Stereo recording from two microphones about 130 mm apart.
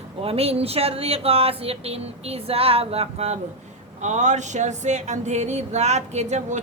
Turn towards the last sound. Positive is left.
turn(degrees=-60)  # may be behind; listen again after turning